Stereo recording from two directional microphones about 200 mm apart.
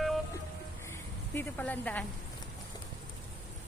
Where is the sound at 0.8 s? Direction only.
10° left (ahead or behind).